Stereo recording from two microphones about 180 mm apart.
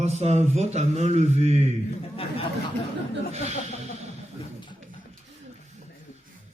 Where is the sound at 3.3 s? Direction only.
40° right (ahead or behind).